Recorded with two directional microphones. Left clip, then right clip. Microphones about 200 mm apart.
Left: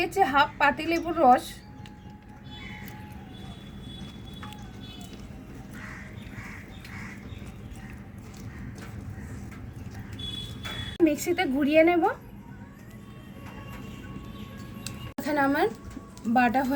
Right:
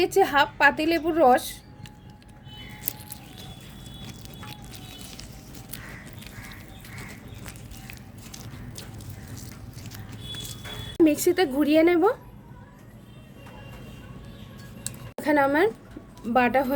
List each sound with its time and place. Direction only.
0.0 s a woman's voice: 55° right (ahead or behind)
11.0 s a woman's voice: 60° right (ahead or behind)
15.2 s a woman's voice: 55° right (ahead or behind)